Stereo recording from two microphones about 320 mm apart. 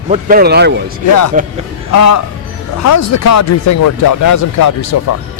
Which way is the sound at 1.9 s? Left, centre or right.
Left.